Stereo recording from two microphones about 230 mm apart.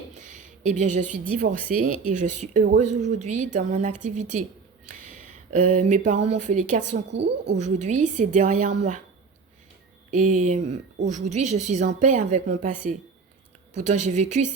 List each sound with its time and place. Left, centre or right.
0.1 s a sound: right
1.6 s a woman's voice: right
5.5 s a woman's voice: right
7.1 s speech: right
7.5 s a woman's voice: right
10.1 s a woman's voice: right